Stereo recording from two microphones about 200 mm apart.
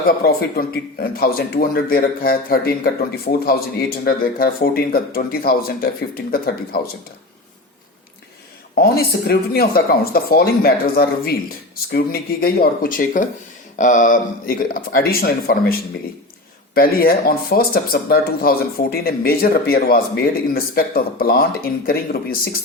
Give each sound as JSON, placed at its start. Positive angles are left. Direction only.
{"t": 0.3, "sound": "speech", "side_deg": 50}
{"t": 8.8, "sound": "speech", "side_deg": 50}
{"t": 16.7, "sound": "speech", "side_deg": 50}